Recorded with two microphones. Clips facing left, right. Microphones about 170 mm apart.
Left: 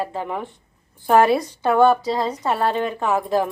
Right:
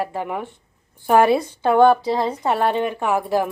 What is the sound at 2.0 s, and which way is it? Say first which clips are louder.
Speech: right 1 dB; 25° right (ahead or behind).